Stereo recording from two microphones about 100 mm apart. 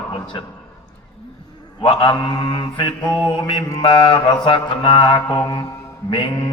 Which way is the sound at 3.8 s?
55° left (ahead or behind).